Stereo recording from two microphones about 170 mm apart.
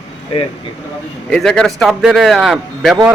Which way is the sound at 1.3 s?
5° left (ahead or behind).